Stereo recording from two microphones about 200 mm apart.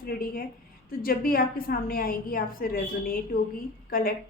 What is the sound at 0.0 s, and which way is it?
A woman's voice, 45° left (ahead or behind).